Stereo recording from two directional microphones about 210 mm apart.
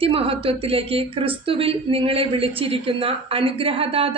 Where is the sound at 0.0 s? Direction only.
25° right (ahead or behind).